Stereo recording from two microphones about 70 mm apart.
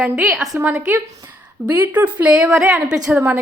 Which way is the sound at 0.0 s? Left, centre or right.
Centre.